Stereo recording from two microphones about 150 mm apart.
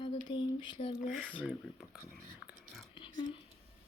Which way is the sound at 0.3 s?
30° left (ahead or behind).